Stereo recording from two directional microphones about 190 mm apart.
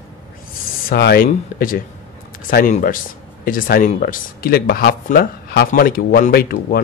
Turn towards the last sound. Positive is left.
turn(degrees=50)  # may be behind; listen again after turning